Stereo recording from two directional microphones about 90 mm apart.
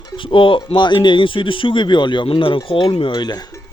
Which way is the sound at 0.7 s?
60° left (ahead or behind).